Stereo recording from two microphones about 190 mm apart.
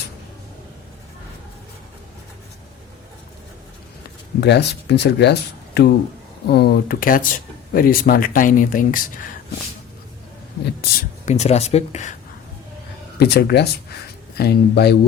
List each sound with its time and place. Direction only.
4.4 s speech: 60° left (ahead or behind); by 9.3 s 45° left (ahead or behind)
11.3 s speech: 35° left (ahead or behind)
13.1 s speech: 60° left (ahead or behind)